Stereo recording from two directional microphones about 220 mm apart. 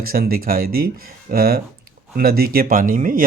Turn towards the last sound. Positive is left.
turn(degrees=-40)  # may be behind; listen again after turning